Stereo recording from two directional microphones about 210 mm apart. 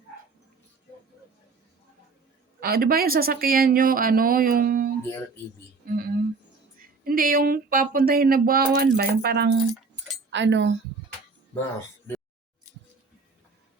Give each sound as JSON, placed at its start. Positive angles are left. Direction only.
{"t": 2.6, "sound": "speech", "side_deg": -45}